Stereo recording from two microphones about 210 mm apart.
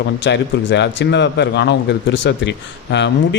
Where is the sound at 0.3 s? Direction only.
55° left (ahead or behind).